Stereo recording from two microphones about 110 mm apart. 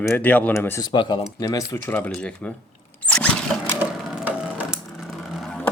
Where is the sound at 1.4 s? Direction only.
30° left (ahead or behind).